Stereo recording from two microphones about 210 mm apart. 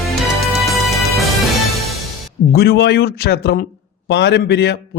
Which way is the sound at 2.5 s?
50° left (ahead or behind).